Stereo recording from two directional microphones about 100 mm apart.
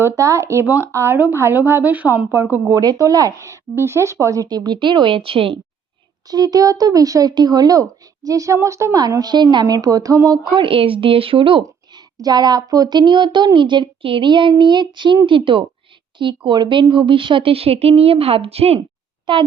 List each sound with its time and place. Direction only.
0.0 s a woman's voice: 30° right (ahead or behind)
2.7 s a woman's voice: 35° right (ahead or behind); by 5.5 s 65° right (ahead or behind)
6.2 s speech: 40° right (ahead or behind)
10.5 s speech: 60° right (ahead or behind)
12.1 s a woman's voice: 40° right (ahead or behind); by 18.8 s 85° right
19.2 s a sound: 55° right (ahead or behind)